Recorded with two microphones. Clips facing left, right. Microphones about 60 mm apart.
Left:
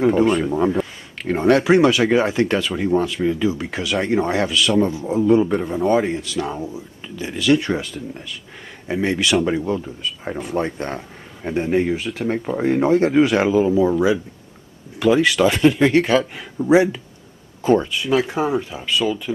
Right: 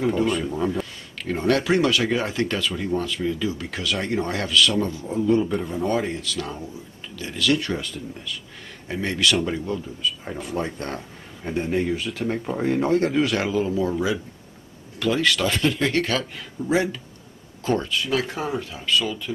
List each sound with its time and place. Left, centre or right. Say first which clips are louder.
0.4 s speech: left 6 dB; left
0.7 s speech: left 6 dB; centre
6.0 s speech: left 5 dB; centre
8.8 s speech: left 3 dB; centre
10.4 s speech: left 5 dB; centre
10.9 s a sound: left 3 dB; centre
11.5 s speech: left 4 dB; centre
15.0 s speech: left 6 dB; centre